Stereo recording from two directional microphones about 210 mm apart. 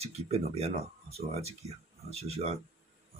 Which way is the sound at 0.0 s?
30° right (ahead or behind).